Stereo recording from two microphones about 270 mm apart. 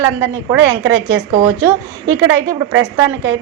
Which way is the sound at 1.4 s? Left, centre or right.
Centre.